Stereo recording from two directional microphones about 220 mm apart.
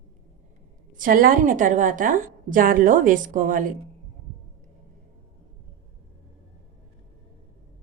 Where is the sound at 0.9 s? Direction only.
40° right (ahead or behind).